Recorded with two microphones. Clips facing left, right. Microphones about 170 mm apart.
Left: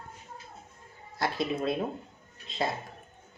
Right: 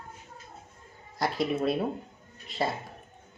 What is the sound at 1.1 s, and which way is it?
Speech, 15° right (ahead or behind).